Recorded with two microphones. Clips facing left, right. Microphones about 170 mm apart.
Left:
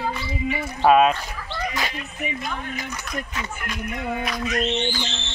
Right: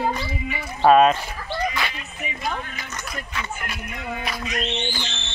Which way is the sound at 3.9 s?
50° left (ahead or behind).